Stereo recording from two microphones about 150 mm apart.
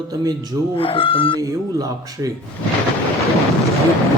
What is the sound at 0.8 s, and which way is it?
Speech, 35° left (ahead or behind).